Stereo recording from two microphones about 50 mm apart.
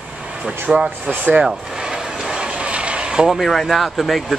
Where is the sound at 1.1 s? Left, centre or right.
Right.